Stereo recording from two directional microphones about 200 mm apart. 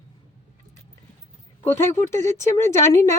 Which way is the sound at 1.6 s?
10° left (ahead or behind).